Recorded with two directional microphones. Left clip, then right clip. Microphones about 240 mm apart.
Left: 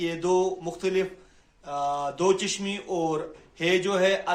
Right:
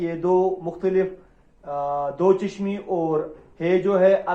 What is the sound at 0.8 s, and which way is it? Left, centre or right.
Speech, left.